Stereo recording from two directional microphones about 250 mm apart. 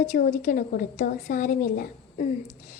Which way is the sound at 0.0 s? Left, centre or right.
Left.